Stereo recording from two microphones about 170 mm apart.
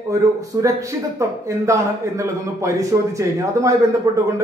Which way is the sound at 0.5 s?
20° right (ahead or behind).